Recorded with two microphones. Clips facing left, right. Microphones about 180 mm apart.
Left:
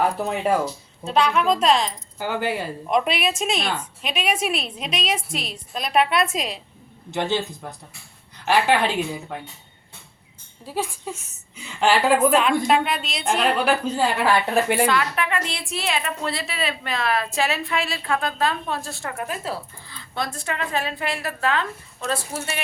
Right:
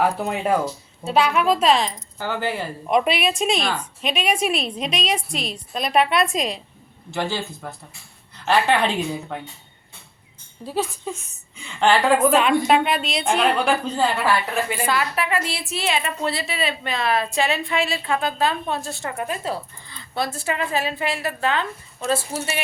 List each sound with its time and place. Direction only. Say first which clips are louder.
0.0 s a woman's voice: even; centre (ahead or behind)
2.1 s a woman's voice: left 1 dB; 15° left (ahead or behind)
2.8 s a woman's voice: right 3 dB; centre (ahead or behind)
7.1 s a man's voice: left 2 dB; 20° left (ahead or behind)
10.7 s a woman's voice: right 2 dB; 10° left (ahead or behind)
14.8 s a woman's voice: even; 5° right (ahead or behind)
22.1 s speech: right 4 dB; 25° right (ahead or behind)